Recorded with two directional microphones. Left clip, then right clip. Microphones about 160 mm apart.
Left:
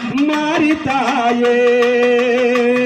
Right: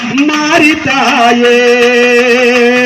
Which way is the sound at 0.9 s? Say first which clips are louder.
Right 8 dB; 35° right (ahead or behind).